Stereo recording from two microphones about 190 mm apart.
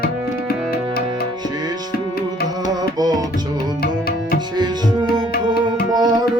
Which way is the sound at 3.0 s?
20° right (ahead or behind).